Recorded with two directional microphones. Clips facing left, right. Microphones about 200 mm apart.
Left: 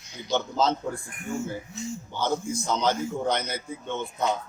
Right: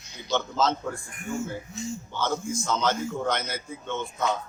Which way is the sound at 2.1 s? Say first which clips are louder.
Left 2 dB; 15° left (ahead or behind).